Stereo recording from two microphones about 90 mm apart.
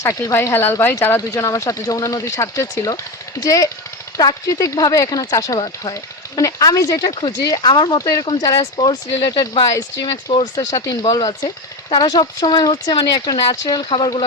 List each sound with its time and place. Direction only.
0.0 s speech: 35° left (ahead or behind)
7.0 s speech: 55° left (ahead or behind)
7.4 s speech: 40° left (ahead or behind)
7.7 s speech: 55° left (ahead or behind)
7.9 s speech: 40° left (ahead or behind)